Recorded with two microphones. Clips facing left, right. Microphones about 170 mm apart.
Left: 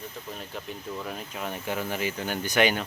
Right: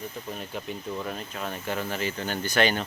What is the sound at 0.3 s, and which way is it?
Speech, 5° right (ahead or behind).